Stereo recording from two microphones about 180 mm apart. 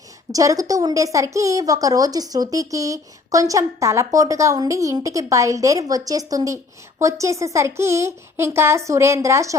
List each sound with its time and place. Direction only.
0.3 s speech: 20° right (ahead or behind)